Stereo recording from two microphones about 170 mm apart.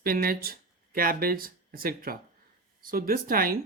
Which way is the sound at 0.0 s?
60° right (ahead or behind).